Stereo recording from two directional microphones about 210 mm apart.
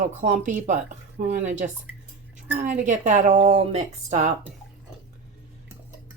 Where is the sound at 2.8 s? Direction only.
35° right (ahead or behind).